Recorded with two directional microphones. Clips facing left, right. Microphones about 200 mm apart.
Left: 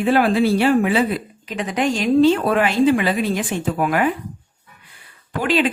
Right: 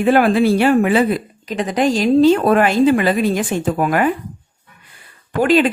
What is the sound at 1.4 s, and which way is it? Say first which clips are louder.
Speech: right 4 dB; 40° right (ahead or behind).